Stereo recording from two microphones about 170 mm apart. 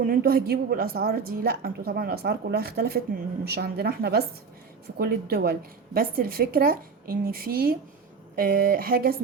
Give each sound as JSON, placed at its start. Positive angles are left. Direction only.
{"t": 0.0, "sound": "a woman's voice", "side_deg": -60}